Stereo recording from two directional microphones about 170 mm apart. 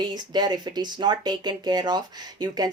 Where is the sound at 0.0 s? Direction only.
25° right (ahead or behind).